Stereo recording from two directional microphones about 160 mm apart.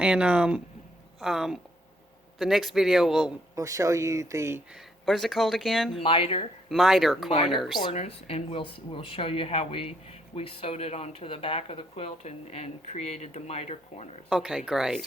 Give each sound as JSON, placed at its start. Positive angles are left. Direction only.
{"t": 0.0, "sound": "speech", "side_deg": -5}
{"t": 3.5, "sound": "speech", "side_deg": -20}
{"t": 4.7, "sound": "speech", "side_deg": 0}
{"t": 6.0, "sound": "speech", "side_deg": 35}
{"t": 6.7, "sound": "speech", "side_deg": 0}
{"t": 7.9, "sound": "speech", "side_deg": 40}
{"t": 14.3, "sound": "speech", "side_deg": -5}